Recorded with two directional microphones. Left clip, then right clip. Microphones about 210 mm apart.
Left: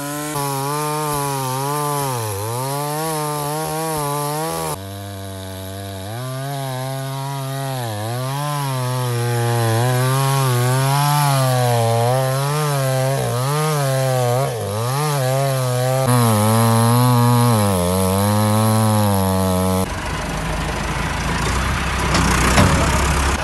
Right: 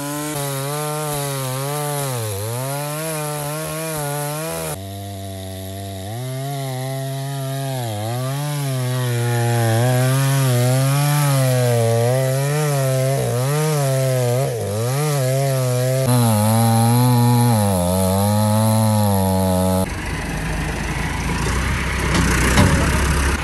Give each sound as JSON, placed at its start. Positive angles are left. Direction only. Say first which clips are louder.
{"t": 9.4, "sound": "chainsaw", "louder": "even", "side_deg": 35}
{"t": 11.4, "sound": "chainsaw", "louder": "left 1 dB", "side_deg": 30}
{"t": 16.3, "sound": "chainsaw", "louder": "left 2 dB", "side_deg": 5}
{"t": 19.4, "sound": "a sound", "louder": "even", "side_deg": 25}
{"t": 22.0, "sound": "vehicle", "louder": "left 2 dB", "side_deg": 0}